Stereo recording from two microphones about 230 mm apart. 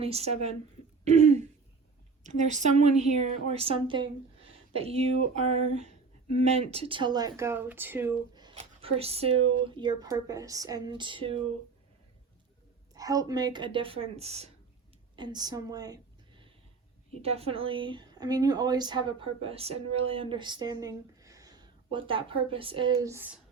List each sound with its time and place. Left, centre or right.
0.0 s a woman's voice: right
1.0 s throat clearing: right
2.2 s a woman's voice: right
12.9 s a woman's voice: centre
17.2 s a woman's voice: right; by 23.4 s centre